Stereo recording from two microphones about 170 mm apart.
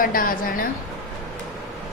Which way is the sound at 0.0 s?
55° left (ahead or behind).